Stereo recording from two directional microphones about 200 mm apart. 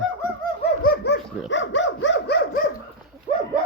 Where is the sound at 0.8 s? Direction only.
55° left (ahead or behind).